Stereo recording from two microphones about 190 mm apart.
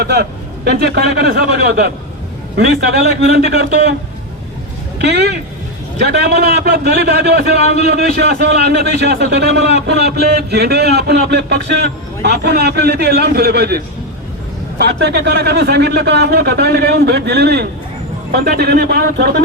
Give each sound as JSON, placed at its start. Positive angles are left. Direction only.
{"t": 0.0, "sound": "a man's voice", "side_deg": -60}
{"t": 4.9, "sound": "speech", "side_deg": -60}